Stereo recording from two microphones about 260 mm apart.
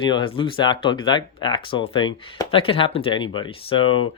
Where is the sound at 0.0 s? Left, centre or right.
Centre.